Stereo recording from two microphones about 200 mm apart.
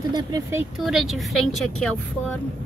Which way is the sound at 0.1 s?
15° right (ahead or behind).